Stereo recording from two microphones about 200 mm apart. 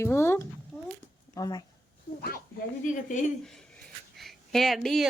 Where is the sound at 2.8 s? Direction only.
40° left (ahead or behind).